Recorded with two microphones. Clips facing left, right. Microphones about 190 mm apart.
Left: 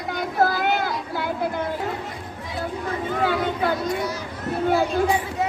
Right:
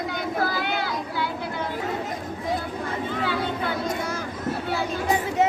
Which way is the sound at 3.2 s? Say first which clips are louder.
Left 6 dB; 45° left (ahead or behind).